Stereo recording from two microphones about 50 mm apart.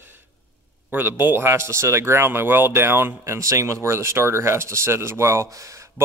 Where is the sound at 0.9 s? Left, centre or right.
Right.